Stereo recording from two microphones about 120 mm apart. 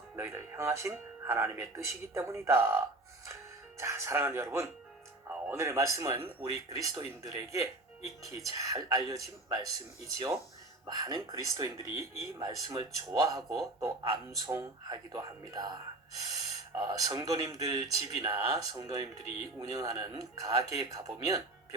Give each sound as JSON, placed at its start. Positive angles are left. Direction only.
{"t": 0.2, "sound": "speech", "side_deg": -20}